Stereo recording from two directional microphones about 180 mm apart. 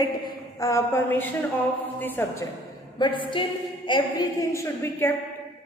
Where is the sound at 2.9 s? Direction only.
25° left (ahead or behind).